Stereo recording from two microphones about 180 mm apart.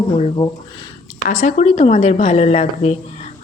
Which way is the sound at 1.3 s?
45° left (ahead or behind).